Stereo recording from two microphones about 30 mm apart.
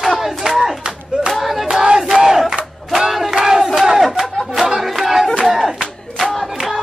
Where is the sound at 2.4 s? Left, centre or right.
Centre.